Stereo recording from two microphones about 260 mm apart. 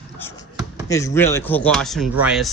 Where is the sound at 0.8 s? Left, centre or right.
Centre.